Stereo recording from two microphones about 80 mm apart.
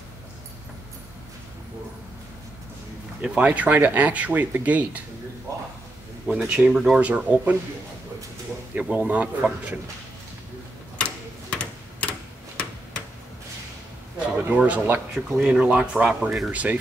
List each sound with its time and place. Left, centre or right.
3.2 s speech: centre
6.2 s speech: centre
7.0 s speech: centre
8.9 s speech: centre
11.5 s tick-tock: centre
14.5 s speech: centre
16.5 s speech: centre